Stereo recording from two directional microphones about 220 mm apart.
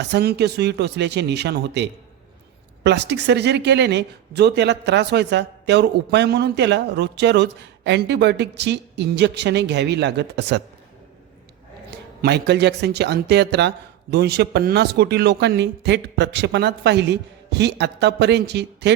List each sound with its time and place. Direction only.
0.0 s speech: 50° right (ahead or behind)
11.9 s speech: 50° right (ahead or behind)